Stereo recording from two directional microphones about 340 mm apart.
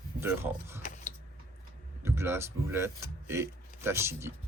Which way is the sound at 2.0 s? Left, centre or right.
Centre.